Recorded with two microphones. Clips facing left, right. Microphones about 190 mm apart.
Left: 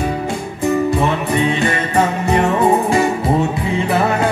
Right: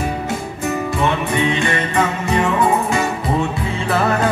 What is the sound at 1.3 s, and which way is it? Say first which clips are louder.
Music: left 2 dB; 35° left (ahead or behind).